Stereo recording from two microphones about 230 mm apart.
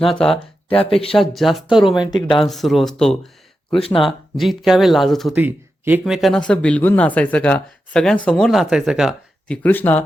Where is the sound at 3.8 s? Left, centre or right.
Left.